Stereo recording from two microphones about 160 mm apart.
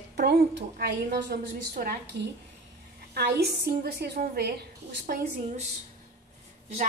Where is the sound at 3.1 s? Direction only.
90° right.